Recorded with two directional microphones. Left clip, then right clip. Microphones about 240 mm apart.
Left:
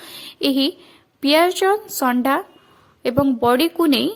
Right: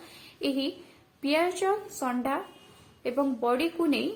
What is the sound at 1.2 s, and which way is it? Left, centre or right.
A woman's voice, left.